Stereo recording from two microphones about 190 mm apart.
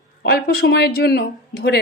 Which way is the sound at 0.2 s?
55° left (ahead or behind).